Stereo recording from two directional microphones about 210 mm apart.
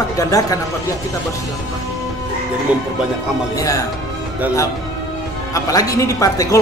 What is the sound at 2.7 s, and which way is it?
Speech, 5° right (ahead or behind).